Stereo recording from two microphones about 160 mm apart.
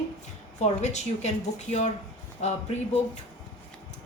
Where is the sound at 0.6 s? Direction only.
45° left (ahead or behind).